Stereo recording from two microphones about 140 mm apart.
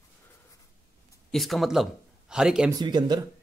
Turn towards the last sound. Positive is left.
turn(degrees=-30)  # may be behind; listen again after turning